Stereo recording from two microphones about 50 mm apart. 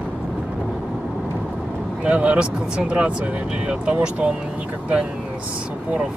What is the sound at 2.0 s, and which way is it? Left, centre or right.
Speech, right.